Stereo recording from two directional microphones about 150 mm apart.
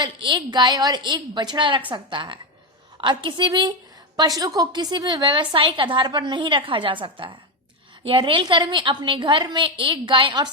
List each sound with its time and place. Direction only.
0.0 s a woman's voice: 30° right (ahead or behind)